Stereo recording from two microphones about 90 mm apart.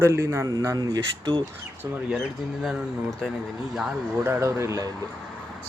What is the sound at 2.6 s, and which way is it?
Speech, centre (ahead or behind).